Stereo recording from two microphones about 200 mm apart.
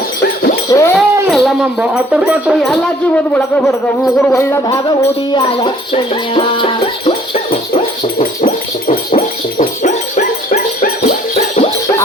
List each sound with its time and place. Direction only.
0.7 s goat: 15° left (ahead or behind)
0.9 s speech: centre (ahead or behind)
3.3 s music: 5° left (ahead or behind)
5.4 s music: 30° left (ahead or behind)
8.2 s dog: 40° left (ahead or behind)
11.3 s a sound: 35° left (ahead or behind)